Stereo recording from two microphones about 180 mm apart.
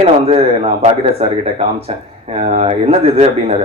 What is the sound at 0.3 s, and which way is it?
Speech, 35° right (ahead or behind).